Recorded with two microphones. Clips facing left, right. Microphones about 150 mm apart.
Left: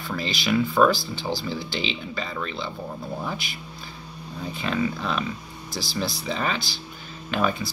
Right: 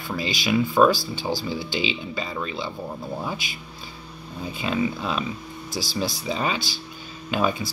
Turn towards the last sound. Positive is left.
turn(degrees=-15)  # may be behind; listen again after turning